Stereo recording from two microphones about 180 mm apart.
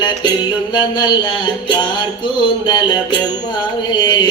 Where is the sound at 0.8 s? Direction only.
25° left (ahead or behind).